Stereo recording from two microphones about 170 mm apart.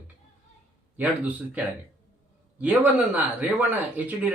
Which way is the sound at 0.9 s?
10° right (ahead or behind).